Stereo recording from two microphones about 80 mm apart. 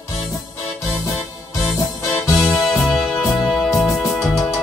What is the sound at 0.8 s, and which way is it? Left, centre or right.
Music, left.